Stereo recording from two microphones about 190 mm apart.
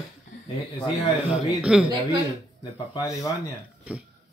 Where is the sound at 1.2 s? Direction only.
5° right (ahead or behind).